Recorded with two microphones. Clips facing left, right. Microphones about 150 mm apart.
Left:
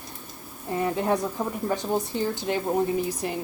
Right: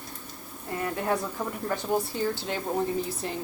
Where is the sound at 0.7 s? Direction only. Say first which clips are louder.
Left 4 dB; 20° left (ahead or behind).